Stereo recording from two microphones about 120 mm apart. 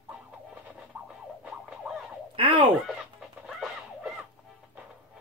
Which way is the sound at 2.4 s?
45° right (ahead or behind).